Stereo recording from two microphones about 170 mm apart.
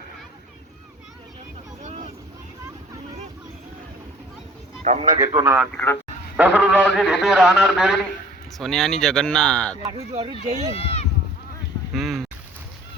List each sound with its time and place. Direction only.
1.9 s vehicle: 40° right (ahead or behind)
4.8 s a man's voice: 40° right (ahead or behind)
5.3 s speech: 25° right (ahead or behind)
5.7 s speech: 15° left (ahead or behind)
6.3 s a man's voice: 5° right (ahead or behind)
9.8 s speech: 20° right (ahead or behind)
10.4 s speech: 45° right (ahead or behind)
10.8 s speech: 35° left (ahead or behind)
11.9 s a man's voice: centre (ahead or behind)